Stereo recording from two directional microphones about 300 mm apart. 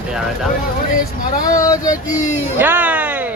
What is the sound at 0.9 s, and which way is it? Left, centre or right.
Speech, left.